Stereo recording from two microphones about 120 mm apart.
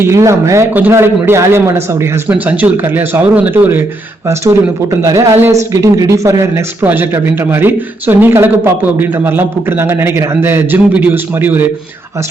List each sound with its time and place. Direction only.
0.0 s speech: 25° right (ahead or behind)
4.3 s speech: 25° right (ahead or behind)